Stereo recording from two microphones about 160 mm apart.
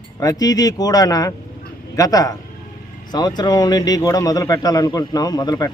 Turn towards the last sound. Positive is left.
turn(degrees=25)  # may be behind; listen again after turning